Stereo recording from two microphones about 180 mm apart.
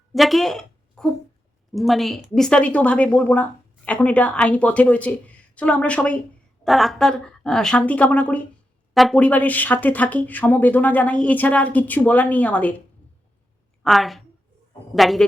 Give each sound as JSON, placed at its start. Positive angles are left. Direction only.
{"t": 0.1, "sound": "a sound", "side_deg": 0}
{"t": 1.7, "sound": "a woman's voice", "side_deg": 0}
{"t": 13.8, "sound": "a woman's voice", "side_deg": 0}